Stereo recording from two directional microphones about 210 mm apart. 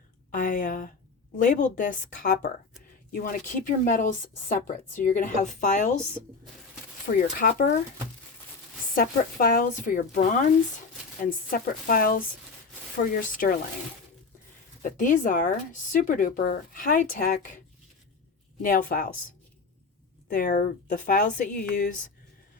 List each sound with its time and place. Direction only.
0.3 s a sound: 40° left (ahead or behind)
1.4 s speech: 35° left (ahead or behind)
7.1 s speech: 40° left (ahead or behind)
9.0 s a woman's voice: 45° left (ahead or behind)
14.8 s speech: 40° left (ahead or behind)
18.6 s a woman's voice: 45° left (ahead or behind)
20.6 s speech: 40° left (ahead or behind)